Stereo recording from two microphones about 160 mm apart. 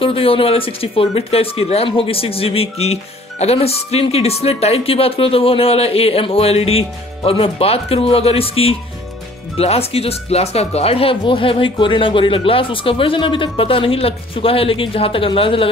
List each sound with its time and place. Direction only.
0.0 s speech: 35° left (ahead or behind)